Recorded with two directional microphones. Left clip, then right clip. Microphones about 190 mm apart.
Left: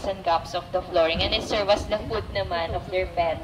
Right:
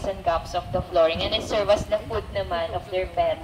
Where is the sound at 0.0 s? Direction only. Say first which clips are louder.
Left 1 dB; 5° right (ahead or behind).